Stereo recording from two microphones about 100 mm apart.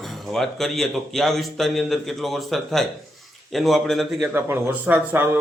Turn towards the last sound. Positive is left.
turn(degrees=-25)  # may be behind; listen again after turning